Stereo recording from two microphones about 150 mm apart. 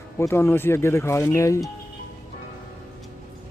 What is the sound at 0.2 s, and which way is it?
Speech, 15° left (ahead or behind).